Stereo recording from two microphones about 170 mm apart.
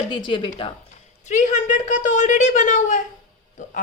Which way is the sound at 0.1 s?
30° left (ahead or behind).